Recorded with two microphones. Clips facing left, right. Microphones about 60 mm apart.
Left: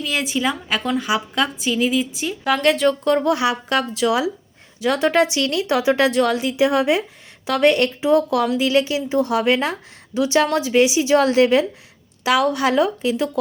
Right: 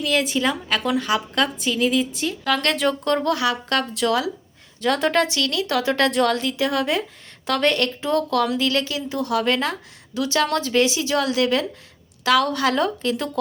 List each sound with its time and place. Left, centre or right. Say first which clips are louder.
0.0 s a woman's voice: right 1 dB; centre
2.7 s a woman's voice: left 3 dB; centre
3.3 s a woman's voice: left 2 dB; left
3.7 s a woman's voice: left 2 dB; centre
5.2 s a woman's voice: left 3 dB; left
6.1 s a woman's voice: left 2 dB; centre
6.3 s a woman's voice: left 4 dB; centre
12.2 s a woman's voice: left 1 dB; centre